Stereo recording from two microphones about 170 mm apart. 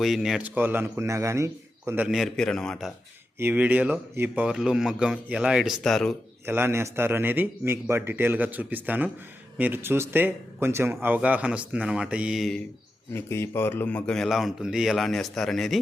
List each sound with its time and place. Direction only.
0.0 s speech: centre (ahead or behind); by 1.5 s 15° right (ahead or behind)
1.9 s a man's voice: 5° right (ahead or behind)
3.3 s a man's voice: 10° right (ahead or behind)
6.4 s speech: 15° right (ahead or behind)
13.1 s a man's voice: 15° left (ahead or behind)